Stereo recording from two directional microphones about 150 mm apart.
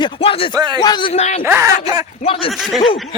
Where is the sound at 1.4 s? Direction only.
15° right (ahead or behind).